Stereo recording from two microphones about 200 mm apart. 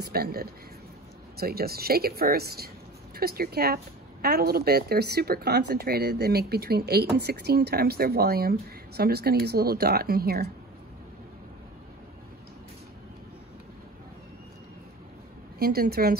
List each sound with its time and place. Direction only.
0.0 s a woman's voice: 50° right (ahead or behind)
15.6 s a woman's voice: 50° right (ahead or behind)